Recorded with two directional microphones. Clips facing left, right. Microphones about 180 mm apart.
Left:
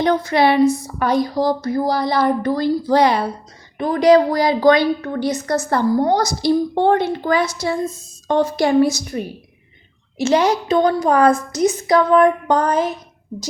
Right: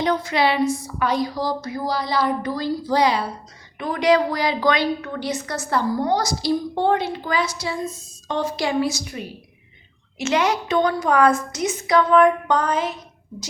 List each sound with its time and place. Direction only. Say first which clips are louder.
0.2 s speech: left 6 dB; 50° left (ahead or behind)
3.8 s a woman's voice: left 6 dB; 35° left (ahead or behind)
10.2 s a woman's voice: left 5 dB; 35° left (ahead or behind)